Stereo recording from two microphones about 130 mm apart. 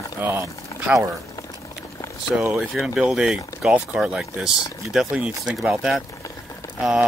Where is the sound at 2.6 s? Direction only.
5° right (ahead or behind).